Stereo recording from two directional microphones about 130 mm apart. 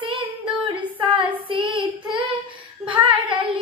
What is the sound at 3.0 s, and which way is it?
Child singing, 40° right (ahead or behind).